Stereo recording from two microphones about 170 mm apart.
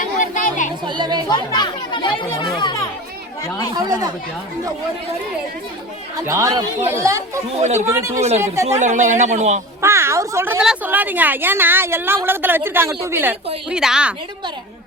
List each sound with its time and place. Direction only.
0.0 s chatter: 50° left (ahead or behind)
0.9 s speech: 25° right (ahead or behind)
1.3 s speech: 25° left (ahead or behind)
3.8 s speech: 20° right (ahead or behind)
6.1 s speech: 20° right (ahead or behind)
8.6 s a man's voice: 45° right (ahead or behind)
9.8 s a woman's voice: 15° right (ahead or behind)